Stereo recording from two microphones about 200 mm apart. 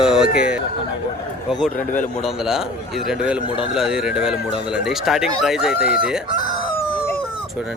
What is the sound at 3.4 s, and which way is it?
Speech, 25° left (ahead or behind).